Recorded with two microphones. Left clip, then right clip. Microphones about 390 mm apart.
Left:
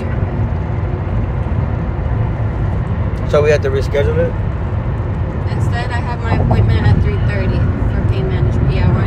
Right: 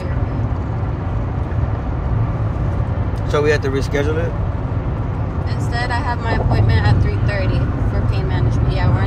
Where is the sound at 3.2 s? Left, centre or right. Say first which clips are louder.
Left 4 dB; centre.